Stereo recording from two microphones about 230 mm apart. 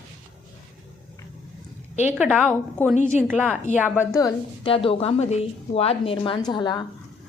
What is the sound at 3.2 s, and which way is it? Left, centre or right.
Speech, centre.